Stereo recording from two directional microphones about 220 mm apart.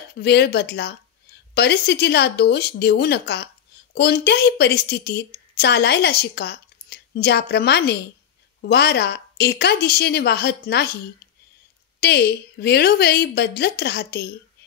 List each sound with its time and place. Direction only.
0.1 s a woman's voice: 50° left (ahead or behind)
12.0 s a woman's voice: 50° left (ahead or behind)